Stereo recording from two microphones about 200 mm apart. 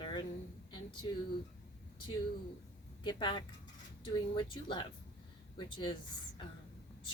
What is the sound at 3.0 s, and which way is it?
Speech, 20° left (ahead or behind).